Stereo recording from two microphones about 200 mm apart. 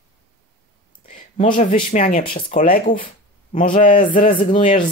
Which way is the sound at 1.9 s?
40° left (ahead or behind).